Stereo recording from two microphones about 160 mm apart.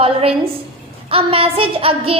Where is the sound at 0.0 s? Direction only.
35° right (ahead or behind).